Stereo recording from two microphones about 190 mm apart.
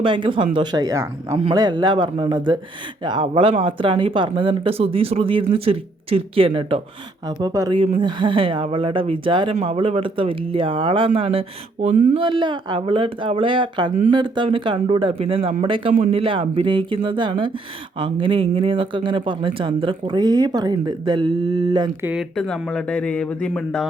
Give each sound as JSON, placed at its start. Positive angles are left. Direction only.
{"t": 0.0, "sound": "speech", "side_deg": -25}
{"t": 12.1, "sound": "speech", "side_deg": -25}
{"t": 22.0, "sound": "speech", "side_deg": -5}